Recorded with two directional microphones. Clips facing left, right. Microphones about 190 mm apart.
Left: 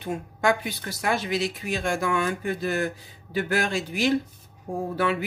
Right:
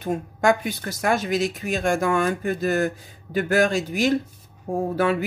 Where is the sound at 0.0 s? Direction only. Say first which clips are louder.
Right 4 dB; 45° right (ahead or behind).